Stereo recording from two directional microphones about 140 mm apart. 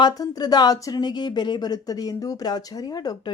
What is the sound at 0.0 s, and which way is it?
A woman's voice, 25° left (ahead or behind).